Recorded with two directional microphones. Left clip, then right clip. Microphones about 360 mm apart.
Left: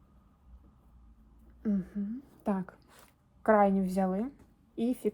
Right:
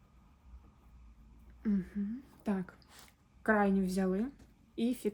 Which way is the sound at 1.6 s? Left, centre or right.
Centre.